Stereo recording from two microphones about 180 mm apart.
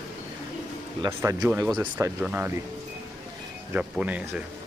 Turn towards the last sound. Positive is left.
turn(degrees=-10)  # may be behind; listen again after turning